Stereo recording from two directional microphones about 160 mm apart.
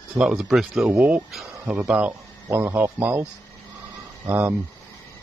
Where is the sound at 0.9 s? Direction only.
15° right (ahead or behind).